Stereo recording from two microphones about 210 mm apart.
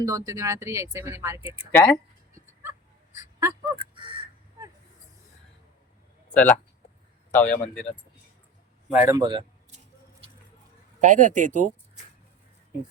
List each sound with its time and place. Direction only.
0.0 s speech: 15° right (ahead or behind)
2.6 s fowl: 15° right (ahead or behind)
6.3 s speech: 5° left (ahead or behind)
8.9 s speech: 10° right (ahead or behind)
11.0 s speech: 40° right (ahead or behind)